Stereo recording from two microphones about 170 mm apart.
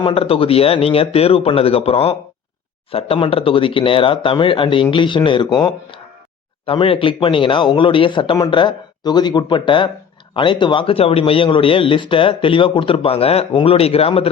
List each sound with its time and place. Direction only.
0.0 s speech: 35° left (ahead or behind)